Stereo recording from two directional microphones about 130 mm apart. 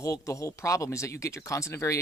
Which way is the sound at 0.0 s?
20° left (ahead or behind).